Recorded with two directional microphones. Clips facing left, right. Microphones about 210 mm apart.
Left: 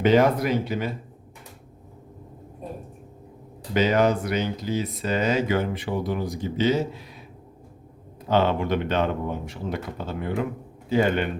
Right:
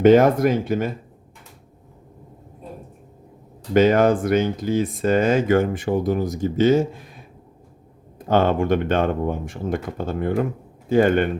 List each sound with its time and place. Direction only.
0.0 s speech: 50° right (ahead or behind)
3.8 s speech: 50° right (ahead or behind)
8.3 s a man's voice: 50° right (ahead or behind)